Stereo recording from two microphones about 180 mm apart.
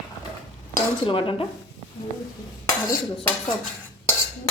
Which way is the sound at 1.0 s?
30° left (ahead or behind).